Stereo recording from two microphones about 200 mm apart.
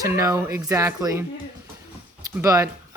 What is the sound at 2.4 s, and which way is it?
Speech, 15° right (ahead or behind).